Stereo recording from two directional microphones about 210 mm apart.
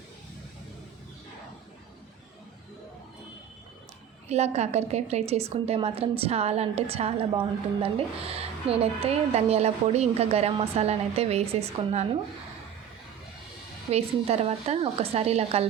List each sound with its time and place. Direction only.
4.3 s a woman's voice: 30° right (ahead or behind)
13.9 s a woman's voice: 30° right (ahead or behind)